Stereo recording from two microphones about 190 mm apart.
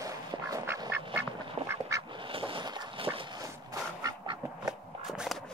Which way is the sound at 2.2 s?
25° right (ahead or behind).